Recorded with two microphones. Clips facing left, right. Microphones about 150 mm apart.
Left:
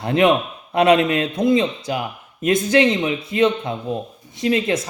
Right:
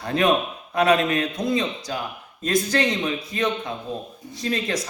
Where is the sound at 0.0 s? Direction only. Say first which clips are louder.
Left 4 dB; 25° left (ahead or behind).